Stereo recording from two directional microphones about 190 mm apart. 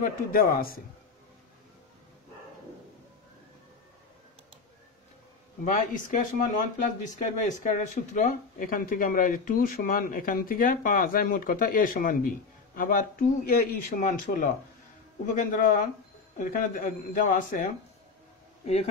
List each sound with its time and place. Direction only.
0.0 s speech: 50° left (ahead or behind)
5.7 s speech: 40° left (ahead or behind)